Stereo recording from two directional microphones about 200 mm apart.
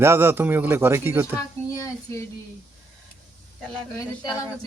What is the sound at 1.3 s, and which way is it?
Speech, 15° left (ahead or behind).